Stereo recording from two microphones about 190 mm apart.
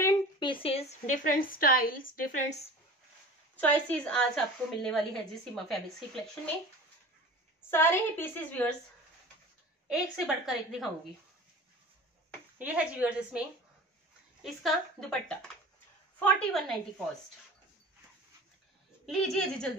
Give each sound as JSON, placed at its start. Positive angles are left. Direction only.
{"t": 0.0, "sound": "a woman's voice", "side_deg": 20}
{"t": 3.5, "sound": "a woman's voice", "side_deg": 10}
{"t": 7.7, "sound": "a woman's voice", "side_deg": 10}
{"t": 9.8, "sound": "a woman's voice", "side_deg": -5}
{"t": 12.5, "sound": "a woman's voice", "side_deg": -5}
{"t": 14.4, "sound": "a woman's voice", "side_deg": 0}
{"t": 19.0, "sound": "a woman's voice", "side_deg": 0}